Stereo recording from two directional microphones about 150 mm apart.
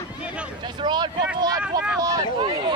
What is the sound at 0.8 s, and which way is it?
Vehicle, 30° right (ahead or behind).